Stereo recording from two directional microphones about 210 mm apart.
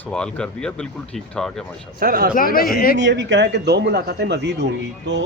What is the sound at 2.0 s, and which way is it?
Speech, 45° right (ahead or behind).